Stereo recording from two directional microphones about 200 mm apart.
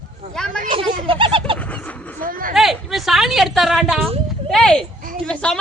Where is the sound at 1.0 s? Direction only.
25° right (ahead or behind).